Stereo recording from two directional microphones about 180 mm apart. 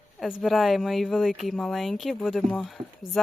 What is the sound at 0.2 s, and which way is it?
Speech, centre (ahead or behind).